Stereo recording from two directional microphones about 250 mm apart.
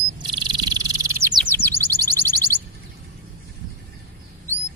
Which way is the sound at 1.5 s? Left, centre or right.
Centre.